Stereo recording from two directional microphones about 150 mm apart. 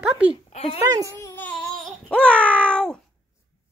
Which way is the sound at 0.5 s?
40° left (ahead or behind).